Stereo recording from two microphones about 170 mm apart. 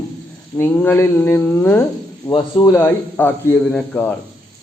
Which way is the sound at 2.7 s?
10° left (ahead or behind).